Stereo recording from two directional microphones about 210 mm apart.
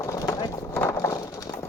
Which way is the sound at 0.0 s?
15° left (ahead or behind).